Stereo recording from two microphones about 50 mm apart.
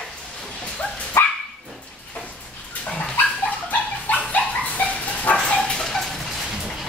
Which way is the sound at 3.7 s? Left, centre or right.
Left.